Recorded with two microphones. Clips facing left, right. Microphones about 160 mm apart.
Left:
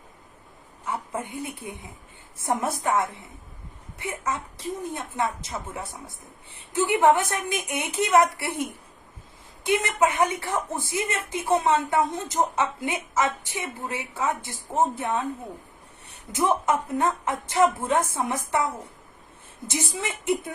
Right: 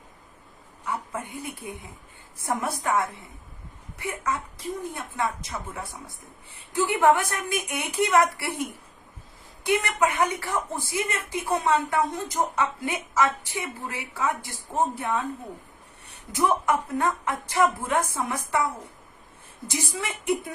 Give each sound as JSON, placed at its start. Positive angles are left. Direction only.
{"t": 0.9, "sound": "a woman's voice", "side_deg": 20}
{"t": 9.6, "sound": "a woman's voice", "side_deg": 20}